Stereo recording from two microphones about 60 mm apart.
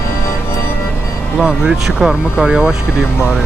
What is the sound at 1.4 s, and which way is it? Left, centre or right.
Speech, centre.